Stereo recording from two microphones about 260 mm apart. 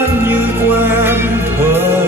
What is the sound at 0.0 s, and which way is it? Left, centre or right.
Music, centre.